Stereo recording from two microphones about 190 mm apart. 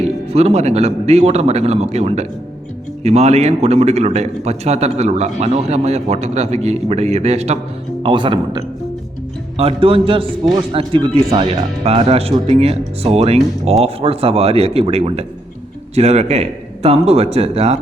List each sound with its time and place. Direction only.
0.0 s a man's voice: 35° right (ahead or behind)